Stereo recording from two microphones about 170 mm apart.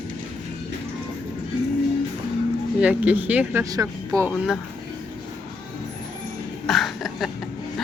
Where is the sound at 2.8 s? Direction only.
10° right (ahead or behind).